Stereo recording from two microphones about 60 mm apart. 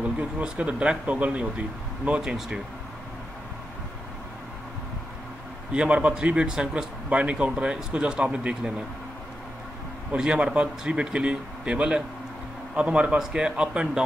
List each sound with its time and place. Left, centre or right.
0.2 s a man's voice: right
5.7 s a man's voice: centre
10.1 s a man's voice: centre